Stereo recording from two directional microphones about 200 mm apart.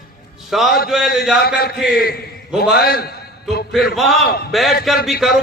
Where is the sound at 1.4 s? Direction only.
50° left (ahead or behind).